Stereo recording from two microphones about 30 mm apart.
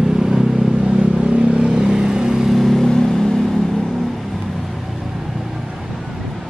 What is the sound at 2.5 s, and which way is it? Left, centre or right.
Vehicle, centre.